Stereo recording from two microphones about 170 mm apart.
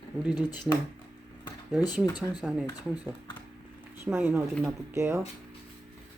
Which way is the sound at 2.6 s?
25° left (ahead or behind).